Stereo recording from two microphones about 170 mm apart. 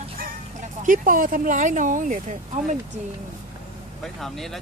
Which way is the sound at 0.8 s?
55° right (ahead or behind).